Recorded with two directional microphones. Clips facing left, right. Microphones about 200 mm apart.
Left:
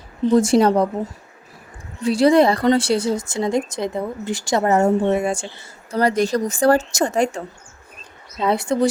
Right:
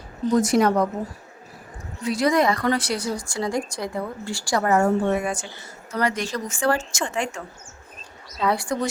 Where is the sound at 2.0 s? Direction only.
30° left (ahead or behind).